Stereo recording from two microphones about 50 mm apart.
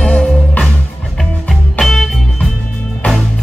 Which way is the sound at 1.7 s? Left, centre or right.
Centre.